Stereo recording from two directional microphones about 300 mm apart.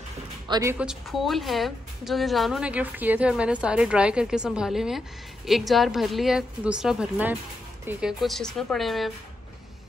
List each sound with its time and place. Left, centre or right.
0.5 s a woman's voice: centre